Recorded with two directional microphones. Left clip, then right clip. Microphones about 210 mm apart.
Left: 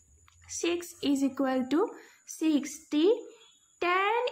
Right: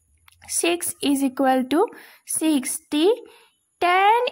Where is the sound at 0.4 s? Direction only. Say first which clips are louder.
Right 8 dB; 50° right (ahead or behind).